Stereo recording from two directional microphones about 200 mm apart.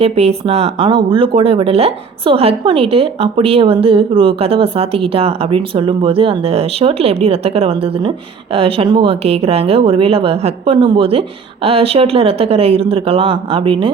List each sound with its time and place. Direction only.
0.0 s speech: 30° right (ahead or behind)